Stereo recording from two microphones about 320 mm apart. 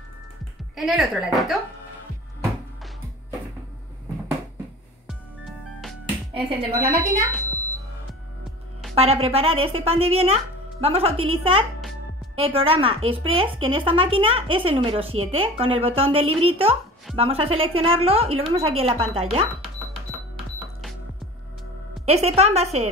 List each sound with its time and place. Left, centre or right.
0.7 s speech: centre
6.3 s a woman's voice: centre
8.9 s a woman's voice: centre
22.0 s a woman's voice: centre